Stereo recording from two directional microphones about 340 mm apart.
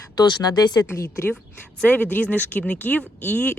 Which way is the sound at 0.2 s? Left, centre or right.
Centre.